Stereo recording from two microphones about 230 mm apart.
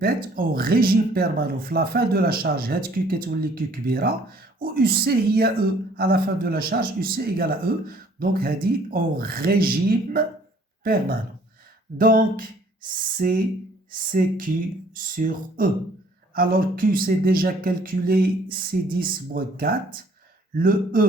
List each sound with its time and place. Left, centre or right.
0.0 s speech: right